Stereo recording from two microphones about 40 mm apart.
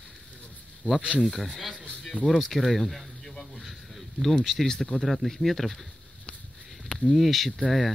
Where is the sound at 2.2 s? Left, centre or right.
Centre.